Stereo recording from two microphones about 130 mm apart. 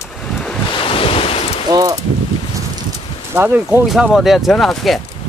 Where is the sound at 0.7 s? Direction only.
45° left (ahead or behind).